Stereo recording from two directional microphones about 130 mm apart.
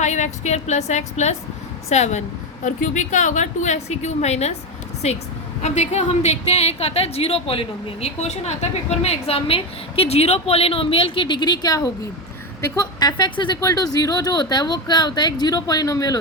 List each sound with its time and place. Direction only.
0.0 s a woman's voice: 65° left (ahead or behind)
2.6 s a woman's voice: 75° left (ahead or behind); by 16.1 s 25° left (ahead or behind)